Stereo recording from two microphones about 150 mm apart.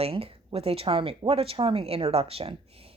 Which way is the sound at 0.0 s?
40° right (ahead or behind).